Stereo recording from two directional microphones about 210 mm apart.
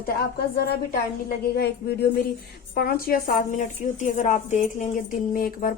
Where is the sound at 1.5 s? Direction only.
50° left (ahead or behind).